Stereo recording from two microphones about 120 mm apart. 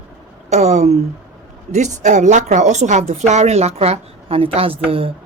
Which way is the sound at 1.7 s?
85° right.